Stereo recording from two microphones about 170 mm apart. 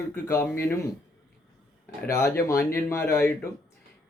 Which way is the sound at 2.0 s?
15° left (ahead or behind).